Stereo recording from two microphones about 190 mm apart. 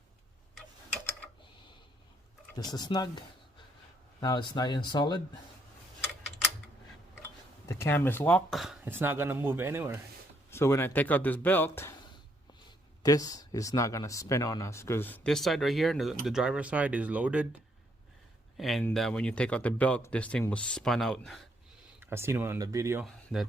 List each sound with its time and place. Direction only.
2.6 s speech: 20° left (ahead or behind)
7.7 s speech: 15° left (ahead or behind); by 10.0 s 10° right (ahead or behind)
10.5 s speech: 15° left (ahead or behind); by 17.5 s 5° right (ahead or behind)
18.5 s speech: centre (ahead or behind)
22.0 s speech: 15° right (ahead or behind)
23.0 s speech: centre (ahead or behind)